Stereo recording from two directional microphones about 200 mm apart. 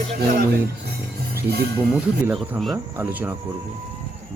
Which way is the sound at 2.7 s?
10° right (ahead or behind).